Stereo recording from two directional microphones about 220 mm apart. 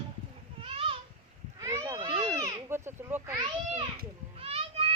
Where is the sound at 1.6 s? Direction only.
15° right (ahead or behind).